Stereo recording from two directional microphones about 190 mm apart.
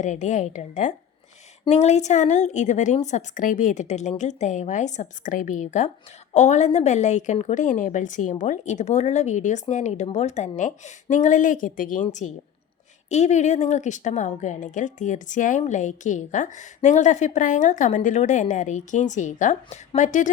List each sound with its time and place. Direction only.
0.0 s a woman's voice: 40° left (ahead or behind)